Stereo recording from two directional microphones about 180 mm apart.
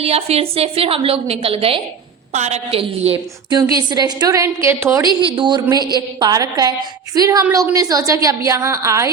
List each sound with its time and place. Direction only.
0.0 s a woman's voice: 35° right (ahead or behind)
3.6 s a woman's voice: 20° right (ahead or behind)
5.2 s a woman's voice: 25° right (ahead or behind)